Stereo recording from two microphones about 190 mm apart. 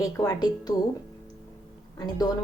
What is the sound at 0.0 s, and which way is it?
Speech, 20° left (ahead or behind).